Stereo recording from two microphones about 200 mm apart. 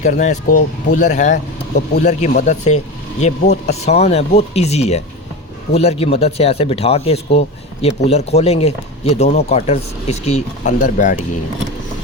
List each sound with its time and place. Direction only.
0.0 s speech: 35° left (ahead or behind)
10.8 s speech: 45° left (ahead or behind)